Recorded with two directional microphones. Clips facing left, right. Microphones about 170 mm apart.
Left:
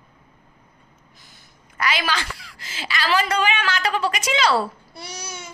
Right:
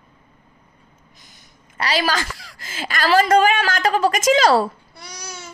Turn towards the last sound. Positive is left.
turn(degrees=25)  # may be behind; listen again after turning